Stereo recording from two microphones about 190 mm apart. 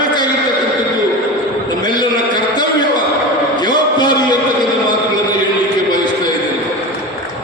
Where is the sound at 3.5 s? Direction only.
25° left (ahead or behind).